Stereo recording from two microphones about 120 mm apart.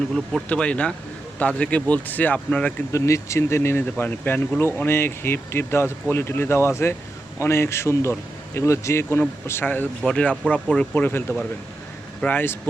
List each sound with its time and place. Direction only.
0.1 s speech: 10° left (ahead or behind)
2.9 s speech: 25° left (ahead or behind)
10.0 s speech: 5° left (ahead or behind)